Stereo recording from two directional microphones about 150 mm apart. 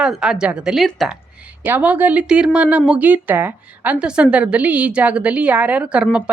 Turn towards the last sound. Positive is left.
turn(degrees=-10)  # may be behind; listen again after turning